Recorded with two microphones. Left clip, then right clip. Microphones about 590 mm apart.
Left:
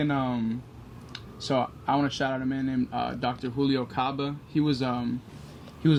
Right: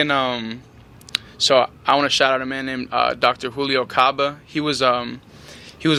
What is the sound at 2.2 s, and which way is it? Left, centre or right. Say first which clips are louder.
Speech: right 10 dB; centre.